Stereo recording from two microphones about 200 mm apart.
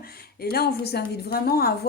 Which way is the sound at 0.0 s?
50° left (ahead or behind).